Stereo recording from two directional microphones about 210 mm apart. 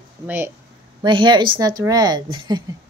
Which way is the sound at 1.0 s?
20° right (ahead or behind).